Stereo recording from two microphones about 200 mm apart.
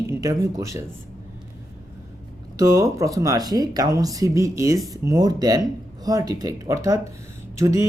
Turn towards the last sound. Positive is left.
turn(degrees=-15)  # may be behind; listen again after turning